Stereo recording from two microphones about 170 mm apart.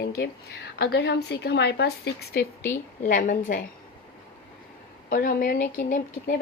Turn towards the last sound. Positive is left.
turn(degrees=60)  # may be behind; listen again after turning